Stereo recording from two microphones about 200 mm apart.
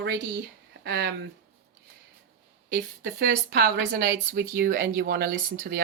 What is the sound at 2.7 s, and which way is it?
Speech, 50° right (ahead or behind).